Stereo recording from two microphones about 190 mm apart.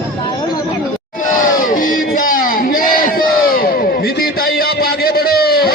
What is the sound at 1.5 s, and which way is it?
Crowd, 45° left (ahead or behind).